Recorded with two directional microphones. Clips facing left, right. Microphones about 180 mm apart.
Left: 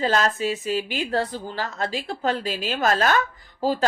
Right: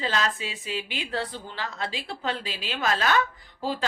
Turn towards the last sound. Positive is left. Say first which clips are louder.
# left 6 dB
turn(degrees=45)  # may be behind; listen again after turning